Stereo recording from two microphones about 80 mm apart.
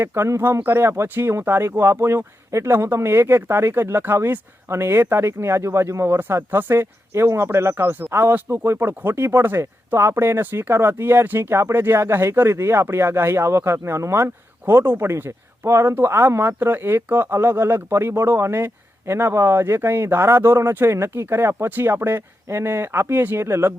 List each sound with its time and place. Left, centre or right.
0.0 s speech: right